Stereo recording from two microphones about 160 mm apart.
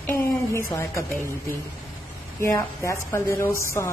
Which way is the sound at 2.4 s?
20° left (ahead or behind).